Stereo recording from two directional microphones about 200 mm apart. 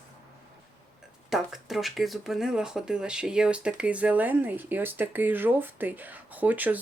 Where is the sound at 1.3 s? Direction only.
Centre (ahead or behind).